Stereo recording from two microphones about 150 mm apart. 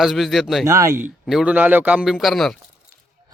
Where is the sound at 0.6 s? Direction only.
20° right (ahead or behind).